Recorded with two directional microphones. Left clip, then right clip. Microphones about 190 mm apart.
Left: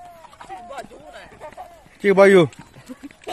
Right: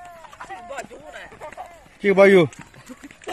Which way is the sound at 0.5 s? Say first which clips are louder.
Even; centre (ahead or behind).